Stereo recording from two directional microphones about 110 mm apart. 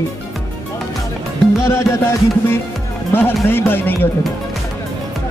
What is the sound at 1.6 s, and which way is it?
Music, 25° left (ahead or behind).